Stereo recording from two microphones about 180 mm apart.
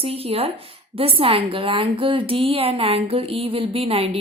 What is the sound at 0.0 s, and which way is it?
Speech, 35° right (ahead or behind).